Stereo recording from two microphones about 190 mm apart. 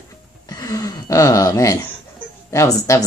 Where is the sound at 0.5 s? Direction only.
20° left (ahead or behind).